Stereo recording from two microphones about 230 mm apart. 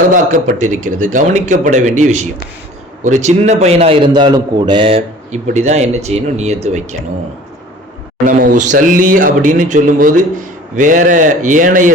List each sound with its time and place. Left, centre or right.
0.1 s a man's voice: right
8.3 s speech: right